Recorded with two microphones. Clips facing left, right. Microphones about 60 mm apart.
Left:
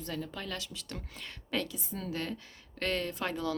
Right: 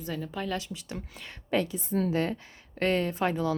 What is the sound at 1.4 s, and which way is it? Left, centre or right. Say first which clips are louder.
Speech: right 7 dB; right.